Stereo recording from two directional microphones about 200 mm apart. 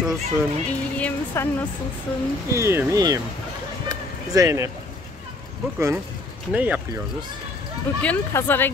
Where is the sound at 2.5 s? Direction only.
15° right (ahead or behind).